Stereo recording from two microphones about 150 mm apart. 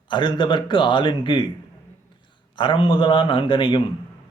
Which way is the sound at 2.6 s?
35° left (ahead or behind).